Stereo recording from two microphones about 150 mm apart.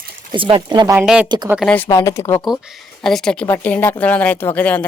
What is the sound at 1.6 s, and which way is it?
Speech, 10° left (ahead or behind).